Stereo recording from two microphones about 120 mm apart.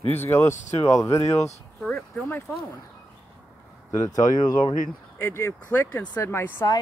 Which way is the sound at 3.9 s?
30° left (ahead or behind).